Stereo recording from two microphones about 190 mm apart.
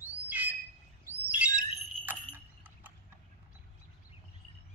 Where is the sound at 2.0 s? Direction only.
10° right (ahead or behind).